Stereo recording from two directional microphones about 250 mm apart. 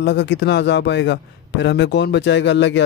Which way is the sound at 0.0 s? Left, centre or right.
Left.